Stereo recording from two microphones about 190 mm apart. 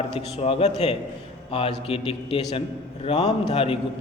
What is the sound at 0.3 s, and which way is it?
A man's voice, 30° left (ahead or behind).